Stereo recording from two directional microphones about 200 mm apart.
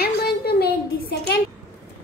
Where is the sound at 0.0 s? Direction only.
50° left (ahead or behind).